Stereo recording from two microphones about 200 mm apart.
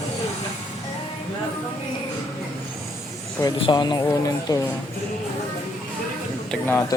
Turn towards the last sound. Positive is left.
turn(degrees=10)  # may be behind; listen again after turning